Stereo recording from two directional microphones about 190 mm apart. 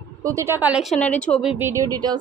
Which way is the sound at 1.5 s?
15° right (ahead or behind).